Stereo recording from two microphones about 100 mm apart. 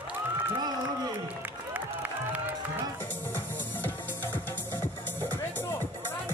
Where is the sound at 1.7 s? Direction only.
15° right (ahead or behind).